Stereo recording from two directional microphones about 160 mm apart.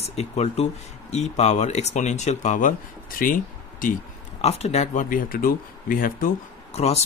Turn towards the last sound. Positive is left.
turn(degrees=40)  # may be behind; listen again after turning